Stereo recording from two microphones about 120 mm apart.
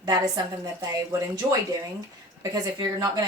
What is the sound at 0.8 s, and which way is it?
Speech, 30° right (ahead or behind).